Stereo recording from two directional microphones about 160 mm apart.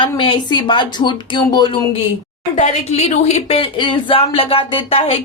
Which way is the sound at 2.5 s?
45° left (ahead or behind).